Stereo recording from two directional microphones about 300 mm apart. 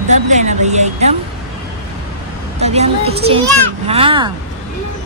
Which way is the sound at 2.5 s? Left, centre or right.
Right.